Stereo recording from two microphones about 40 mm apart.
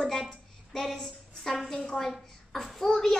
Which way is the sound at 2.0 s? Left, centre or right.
Centre.